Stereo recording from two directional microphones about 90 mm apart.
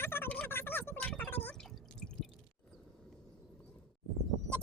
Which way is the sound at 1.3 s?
20° left (ahead or behind).